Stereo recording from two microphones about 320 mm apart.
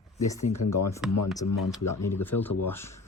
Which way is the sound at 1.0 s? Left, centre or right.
Centre.